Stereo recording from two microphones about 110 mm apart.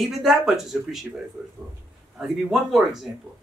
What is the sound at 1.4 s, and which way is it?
Speech, 15° right (ahead or behind).